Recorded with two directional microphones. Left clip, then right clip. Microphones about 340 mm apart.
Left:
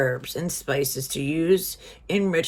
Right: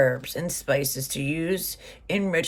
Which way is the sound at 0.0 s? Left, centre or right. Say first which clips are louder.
Right 2 dB; centre.